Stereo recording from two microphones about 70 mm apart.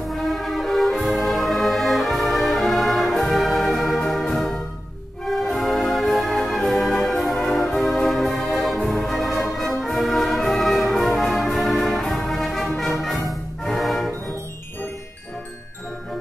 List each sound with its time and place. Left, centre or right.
0.1 s brass instrument: centre
4.1 s music: centre